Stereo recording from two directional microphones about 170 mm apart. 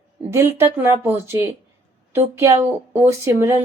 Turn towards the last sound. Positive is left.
turn(degrees=-15)  # may be behind; listen again after turning